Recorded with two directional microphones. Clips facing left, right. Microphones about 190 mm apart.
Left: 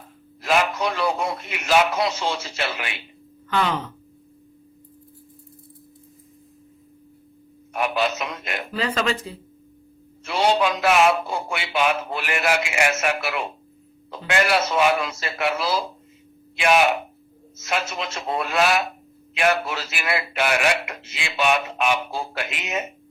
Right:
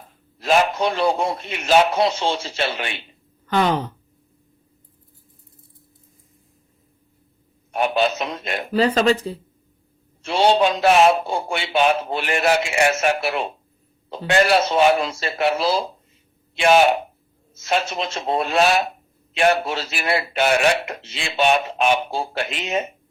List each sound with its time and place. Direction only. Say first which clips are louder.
0.4 s speech: right 3 dB; 30° right (ahead or behind)
7.7 s speech: right 3 dB; 30° right (ahead or behind)